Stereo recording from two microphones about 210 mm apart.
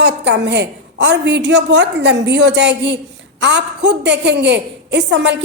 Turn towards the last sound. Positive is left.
turn(degrees=-55)  # may be behind; listen again after turning